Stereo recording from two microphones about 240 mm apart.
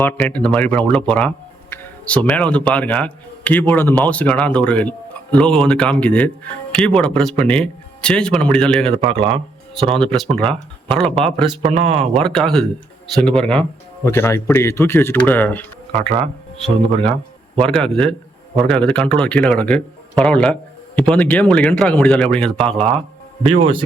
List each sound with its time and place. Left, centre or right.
0.0 s speech: centre
9.0 s speech: right
9.9 s speech: centre
11.6 s speech: right
12.2 s speech: centre
15.9 s speech: right
16.6 s speech: centre